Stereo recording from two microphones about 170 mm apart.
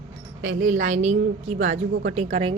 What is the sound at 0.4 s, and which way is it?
A woman's voice, 50° right (ahead or behind).